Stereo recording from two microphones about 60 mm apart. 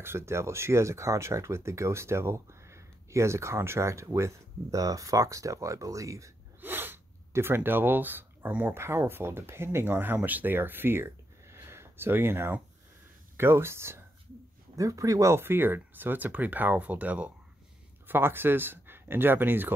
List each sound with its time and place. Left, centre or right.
0.0 s speech: right
6.6 s snort: right
8.6 s speech: right
14.8 s speech: right
15.3 s speech: right
18.0 s speech: right